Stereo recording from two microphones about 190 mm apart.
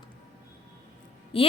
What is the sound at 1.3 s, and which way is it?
Speech, 30° left (ahead or behind).